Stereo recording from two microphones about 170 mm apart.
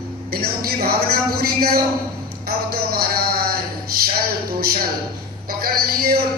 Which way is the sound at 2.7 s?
65° right (ahead or behind).